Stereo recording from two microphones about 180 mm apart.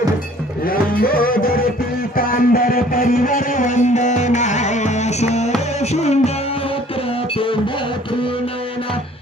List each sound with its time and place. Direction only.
0.7 s music: 55° left (ahead or behind); by 6.3 s 35° left (ahead or behind)